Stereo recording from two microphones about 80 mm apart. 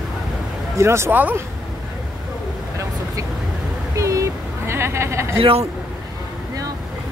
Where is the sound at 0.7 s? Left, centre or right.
Right.